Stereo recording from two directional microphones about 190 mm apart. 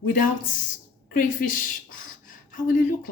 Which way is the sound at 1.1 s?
45° left (ahead or behind).